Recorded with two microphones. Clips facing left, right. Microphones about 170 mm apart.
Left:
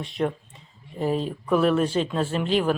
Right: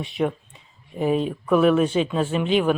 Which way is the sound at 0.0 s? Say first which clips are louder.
Right 2 dB; 5° right (ahead or behind).